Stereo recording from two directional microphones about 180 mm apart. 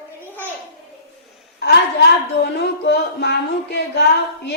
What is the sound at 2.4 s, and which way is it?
A woman's voice, 65° left (ahead or behind).